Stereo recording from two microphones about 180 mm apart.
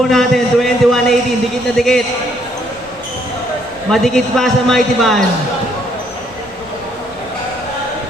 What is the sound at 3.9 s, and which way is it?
A man's voice, centre (ahead or behind).